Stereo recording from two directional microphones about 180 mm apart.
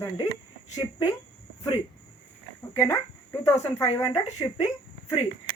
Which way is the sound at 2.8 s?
15° left (ahead or behind).